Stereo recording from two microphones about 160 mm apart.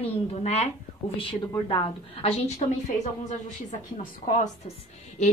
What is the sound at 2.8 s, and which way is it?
A woman's voice, 50° left (ahead or behind).